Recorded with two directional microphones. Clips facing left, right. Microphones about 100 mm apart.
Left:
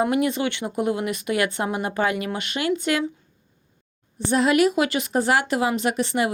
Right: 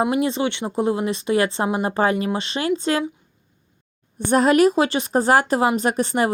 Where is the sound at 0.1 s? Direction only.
25° right (ahead or behind).